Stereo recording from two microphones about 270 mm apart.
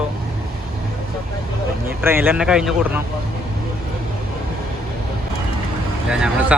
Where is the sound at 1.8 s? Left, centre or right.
Centre.